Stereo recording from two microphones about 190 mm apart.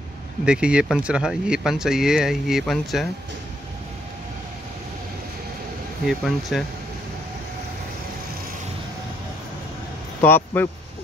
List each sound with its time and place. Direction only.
0.5 s speech: 5° right (ahead or behind)
6.0 s speech: centre (ahead or behind)
10.2 s speech: 10° left (ahead or behind)